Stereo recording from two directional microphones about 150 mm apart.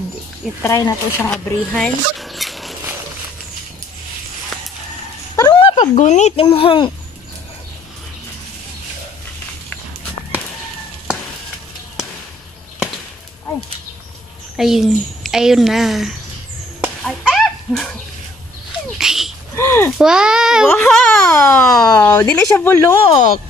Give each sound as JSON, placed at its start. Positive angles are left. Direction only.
{"t": 0.7, "sound": "speech", "side_deg": 20}
{"t": 1.2, "sound": "speech", "side_deg": 5}
{"t": 5.3, "sound": "a sound", "side_deg": 25}
{"t": 5.6, "sound": "a sound", "side_deg": 35}
{"t": 5.9, "sound": "speech", "side_deg": 50}
{"t": 6.4, "sound": "a child's voice", "side_deg": 35}
{"t": 12.7, "sound": "chop", "side_deg": -5}
{"t": 14.6, "sound": "a woman's voice", "side_deg": 0}
{"t": 17.0, "sound": "a sound", "side_deg": 0}
{"t": 18.9, "sound": "dog", "side_deg": -5}
{"t": 19.5, "sound": "a sound", "side_deg": 15}
{"t": 20.0, "sound": "a child's voice", "side_deg": -5}
{"t": 22.0, "sound": "a child's voice", "side_deg": 15}
{"t": 23.0, "sound": "speech", "side_deg": 50}